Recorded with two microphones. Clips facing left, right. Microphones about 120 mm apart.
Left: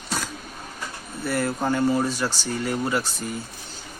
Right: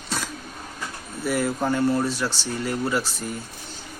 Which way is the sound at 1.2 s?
10° right (ahead or behind).